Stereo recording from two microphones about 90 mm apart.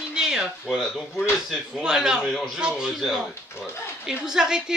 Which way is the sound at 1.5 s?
5° right (ahead or behind).